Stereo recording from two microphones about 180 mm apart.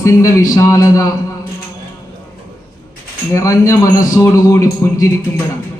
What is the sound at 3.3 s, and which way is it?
A man's voice, 15° left (ahead or behind).